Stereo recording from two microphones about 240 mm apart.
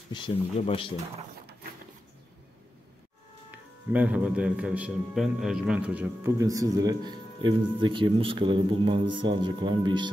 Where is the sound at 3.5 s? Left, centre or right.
Centre.